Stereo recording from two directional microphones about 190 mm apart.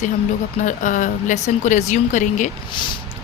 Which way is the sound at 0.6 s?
40° left (ahead or behind).